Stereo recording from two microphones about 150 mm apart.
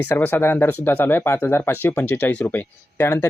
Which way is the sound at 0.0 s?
10° left (ahead or behind).